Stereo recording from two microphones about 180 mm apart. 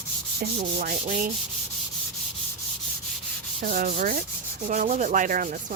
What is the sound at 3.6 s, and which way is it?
Rub, 50° right (ahead or behind).